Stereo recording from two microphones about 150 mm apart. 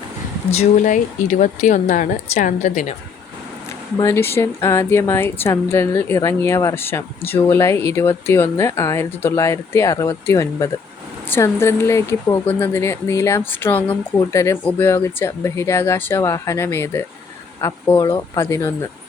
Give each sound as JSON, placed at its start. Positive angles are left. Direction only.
{"t": 0.5, "sound": "speech", "side_deg": 50}
{"t": 3.9, "sound": "speech", "side_deg": 20}